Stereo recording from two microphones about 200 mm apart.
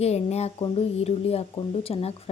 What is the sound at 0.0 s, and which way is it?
A woman's voice, 30° left (ahead or behind).